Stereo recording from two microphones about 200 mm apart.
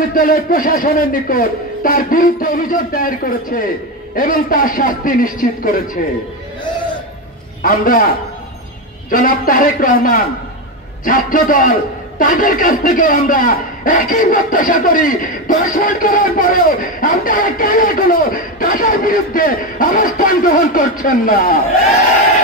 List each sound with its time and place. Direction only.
0.1 s a man's voice: 45° left (ahead or behind)
7.6 s a man's voice: 45° left (ahead or behind)
9.1 s a man's voice: 45° left (ahead or behind)